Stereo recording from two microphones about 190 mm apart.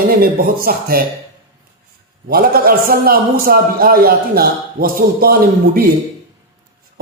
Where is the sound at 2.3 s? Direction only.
50° right (ahead or behind).